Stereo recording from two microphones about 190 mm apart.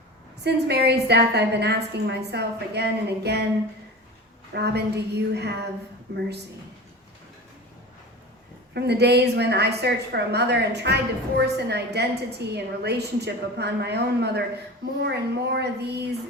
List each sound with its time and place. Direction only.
0.4 s a woman's voice: 60° right (ahead or behind)
4.5 s a woman's voice: 60° right (ahead or behind)
8.7 s a woman's voice: 60° right (ahead or behind)